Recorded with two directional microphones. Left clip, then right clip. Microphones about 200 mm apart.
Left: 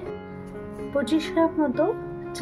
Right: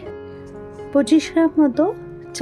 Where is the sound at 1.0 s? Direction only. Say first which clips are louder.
Right 6 dB; 50° right (ahead or behind).